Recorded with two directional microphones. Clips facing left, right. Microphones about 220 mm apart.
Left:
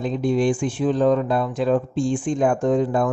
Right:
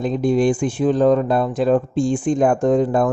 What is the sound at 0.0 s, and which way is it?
Speech, 40° right (ahead or behind).